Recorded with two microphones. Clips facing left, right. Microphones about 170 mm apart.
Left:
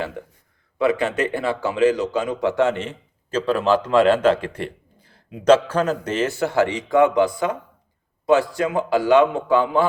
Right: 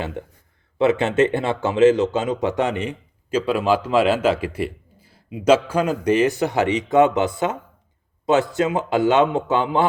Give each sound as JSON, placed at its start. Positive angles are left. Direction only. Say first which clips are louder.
{"t": 0.8, "sound": "a man's voice", "louder": "right 3 dB", "side_deg": -25}